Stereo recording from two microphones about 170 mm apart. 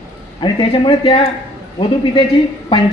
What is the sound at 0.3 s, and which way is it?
Speech, 25° left (ahead or behind).